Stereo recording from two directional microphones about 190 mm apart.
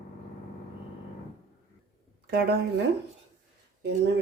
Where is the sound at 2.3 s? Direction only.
55° right (ahead or behind).